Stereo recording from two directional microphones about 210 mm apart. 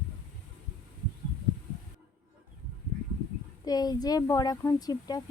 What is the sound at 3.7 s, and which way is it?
A woman's voice, 20° left (ahead or behind).